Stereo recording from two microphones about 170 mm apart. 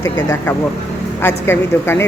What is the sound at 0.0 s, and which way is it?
A woman's voice, 20° left (ahead or behind).